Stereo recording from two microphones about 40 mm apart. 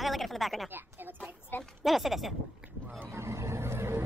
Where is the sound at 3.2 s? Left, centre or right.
Right.